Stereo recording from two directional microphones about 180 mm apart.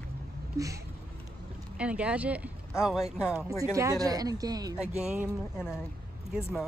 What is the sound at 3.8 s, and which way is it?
Speech, 20° right (ahead or behind).